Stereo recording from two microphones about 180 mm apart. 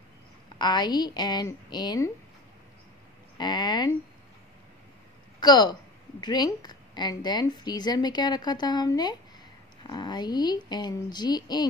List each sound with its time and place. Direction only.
0.6 s a woman's voice: 25° left (ahead or behind)
3.3 s a woman's voice: 25° left (ahead or behind)
5.4 s a woman's voice: 25° left (ahead or behind)